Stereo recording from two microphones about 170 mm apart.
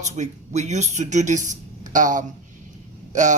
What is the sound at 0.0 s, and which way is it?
Speech, 45° right (ahead or behind).